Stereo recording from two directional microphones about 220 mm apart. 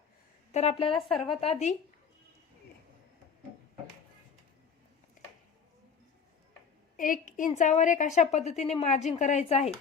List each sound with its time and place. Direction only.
0.5 s a woman's voice: 30° left (ahead or behind)
0.9 s a woman's voice: centre (ahead or behind)
1.4 s a woman's voice: 30° left (ahead or behind)
6.9 s a woman's voice: 35° left (ahead or behind)